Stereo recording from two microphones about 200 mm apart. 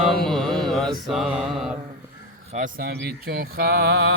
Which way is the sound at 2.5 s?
40° right (ahead or behind).